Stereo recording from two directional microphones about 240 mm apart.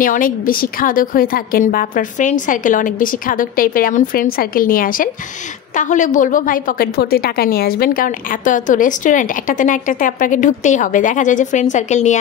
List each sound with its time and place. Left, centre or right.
0.0 s a woman's voice: left